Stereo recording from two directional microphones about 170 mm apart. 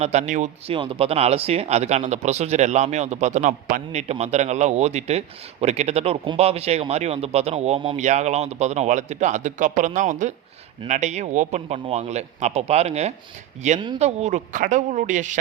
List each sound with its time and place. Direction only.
0.0 s a man's voice: 40° right (ahead or behind)
0.7 s a man's voice: 30° right (ahead or behind)
13.7 s speech: 25° right (ahead or behind)
14.0 s a man's voice: 40° right (ahead or behind)